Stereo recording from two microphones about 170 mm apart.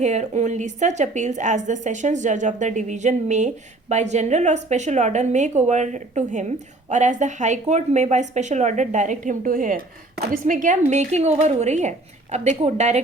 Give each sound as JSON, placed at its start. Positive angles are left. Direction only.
{"t": 0.0, "sound": "a woman's voice", "side_deg": -45}